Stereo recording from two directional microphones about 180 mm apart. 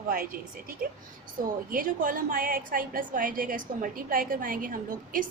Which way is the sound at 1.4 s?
50° right (ahead or behind).